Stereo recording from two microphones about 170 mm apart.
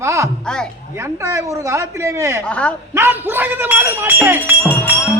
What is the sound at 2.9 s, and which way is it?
A man's voice, 15° right (ahead or behind).